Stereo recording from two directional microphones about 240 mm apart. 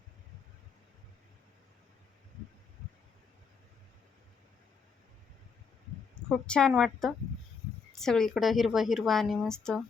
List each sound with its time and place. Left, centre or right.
6.2 s speech: centre